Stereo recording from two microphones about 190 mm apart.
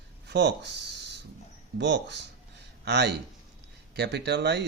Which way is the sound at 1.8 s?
65° right (ahead or behind).